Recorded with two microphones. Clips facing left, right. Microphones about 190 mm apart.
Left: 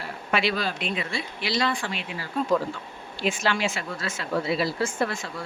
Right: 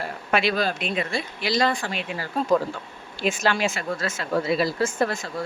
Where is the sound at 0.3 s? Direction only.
45° right (ahead or behind).